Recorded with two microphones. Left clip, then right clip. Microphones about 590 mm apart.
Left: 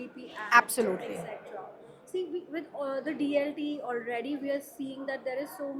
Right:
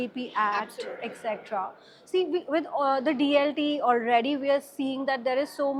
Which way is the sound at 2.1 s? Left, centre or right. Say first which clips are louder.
Right 9 dB; right.